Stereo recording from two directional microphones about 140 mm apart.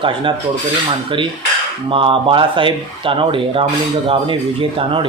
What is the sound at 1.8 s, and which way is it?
Speech, 40° right (ahead or behind).